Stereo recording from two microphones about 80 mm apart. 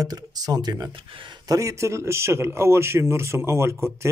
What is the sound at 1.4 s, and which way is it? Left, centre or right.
Speech, right.